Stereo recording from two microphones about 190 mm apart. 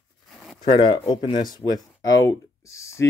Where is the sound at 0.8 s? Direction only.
25° left (ahead or behind).